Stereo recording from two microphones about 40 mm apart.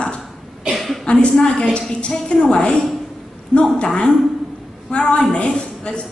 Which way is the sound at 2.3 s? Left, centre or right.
Left.